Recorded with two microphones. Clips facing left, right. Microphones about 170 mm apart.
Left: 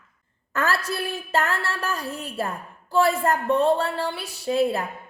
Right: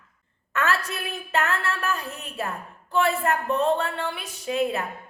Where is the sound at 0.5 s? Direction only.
35° left (ahead or behind).